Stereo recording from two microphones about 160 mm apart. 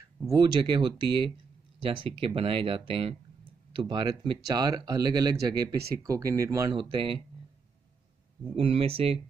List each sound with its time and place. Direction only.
0.3 s speech: 30° right (ahead or behind)
6.7 s speech: 30° right (ahead or behind)
8.5 s speech: 35° right (ahead or behind)